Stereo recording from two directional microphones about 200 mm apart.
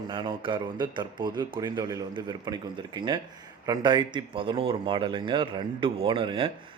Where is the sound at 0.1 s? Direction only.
25° right (ahead or behind).